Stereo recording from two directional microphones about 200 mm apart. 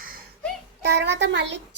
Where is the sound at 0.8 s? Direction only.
55° right (ahead or behind).